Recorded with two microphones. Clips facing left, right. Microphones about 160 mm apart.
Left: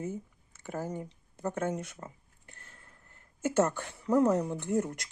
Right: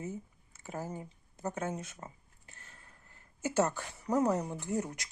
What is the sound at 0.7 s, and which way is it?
Speech, 70° left (ahead or behind).